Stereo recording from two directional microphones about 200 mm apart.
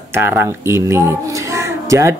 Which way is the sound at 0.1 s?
10° right (ahead or behind).